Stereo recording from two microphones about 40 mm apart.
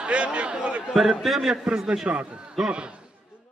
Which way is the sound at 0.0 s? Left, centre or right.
Right.